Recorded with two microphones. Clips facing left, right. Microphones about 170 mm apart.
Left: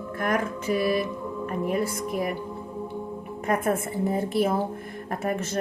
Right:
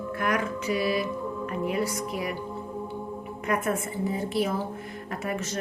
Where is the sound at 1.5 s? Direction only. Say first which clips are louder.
Left 2 dB; 50° left (ahead or behind).